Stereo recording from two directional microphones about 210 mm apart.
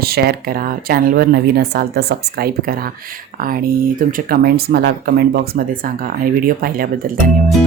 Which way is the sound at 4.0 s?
45° right (ahead or behind).